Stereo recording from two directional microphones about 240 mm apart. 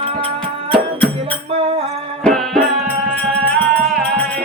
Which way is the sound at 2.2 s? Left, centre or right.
Centre.